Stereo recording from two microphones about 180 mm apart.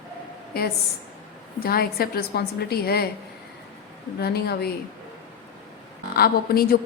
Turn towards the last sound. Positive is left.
turn(degrees=55)  # may be behind; listen again after turning